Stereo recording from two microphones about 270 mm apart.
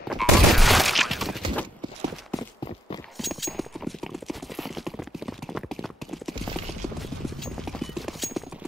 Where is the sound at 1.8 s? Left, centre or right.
Centre.